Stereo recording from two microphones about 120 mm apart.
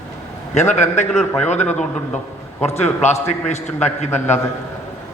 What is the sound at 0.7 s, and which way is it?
Speech, 75° left (ahead or behind).